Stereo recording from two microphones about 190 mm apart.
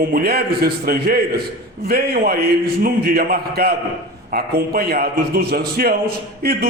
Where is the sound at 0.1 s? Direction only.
55° right (ahead or behind).